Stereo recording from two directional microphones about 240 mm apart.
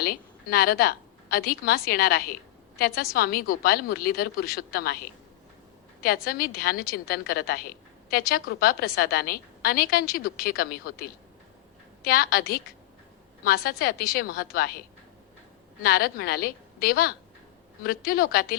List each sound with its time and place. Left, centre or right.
0.0 s a woman's voice: left
6.2 s a woman's voice: left
12.0 s a woman's voice: left
13.7 s a woman's voice: left
15.8 s a woman's voice: left